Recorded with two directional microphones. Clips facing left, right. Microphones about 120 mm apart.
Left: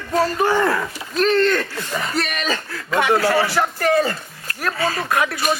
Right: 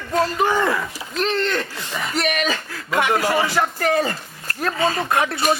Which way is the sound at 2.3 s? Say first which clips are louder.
Right 1 dB; 40° left (ahead or behind).